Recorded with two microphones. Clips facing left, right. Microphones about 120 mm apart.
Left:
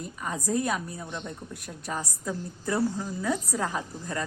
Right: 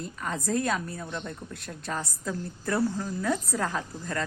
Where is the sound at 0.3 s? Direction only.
10° left (ahead or behind).